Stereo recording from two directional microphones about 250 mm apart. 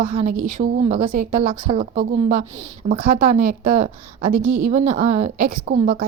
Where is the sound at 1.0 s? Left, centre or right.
Right.